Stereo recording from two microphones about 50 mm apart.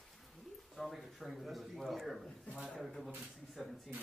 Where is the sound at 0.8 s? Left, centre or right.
Centre.